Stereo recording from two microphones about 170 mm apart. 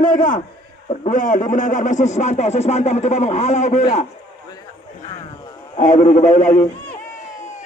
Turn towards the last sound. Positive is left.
turn(degrees=50)  # may be behind; listen again after turning